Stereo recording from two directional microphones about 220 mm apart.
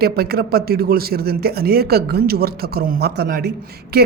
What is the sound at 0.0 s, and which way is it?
Speech, 45° right (ahead or behind).